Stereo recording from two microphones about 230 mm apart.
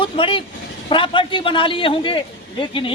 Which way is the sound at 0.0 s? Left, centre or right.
Left.